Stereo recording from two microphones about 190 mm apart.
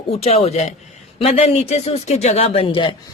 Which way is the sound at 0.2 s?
35° left (ahead or behind).